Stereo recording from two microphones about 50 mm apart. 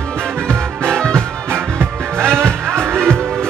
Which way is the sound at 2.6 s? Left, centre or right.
Right.